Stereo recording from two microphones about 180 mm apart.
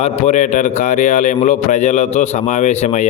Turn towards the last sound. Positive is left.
turn(degrees=40)  # may be behind; listen again after turning